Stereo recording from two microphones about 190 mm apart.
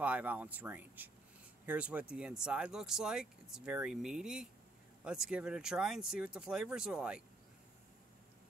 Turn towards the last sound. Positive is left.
turn(degrees=-5)  # may be behind; listen again after turning